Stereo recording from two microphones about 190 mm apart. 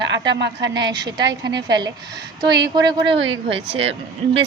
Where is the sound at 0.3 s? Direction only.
65° right (ahead or behind).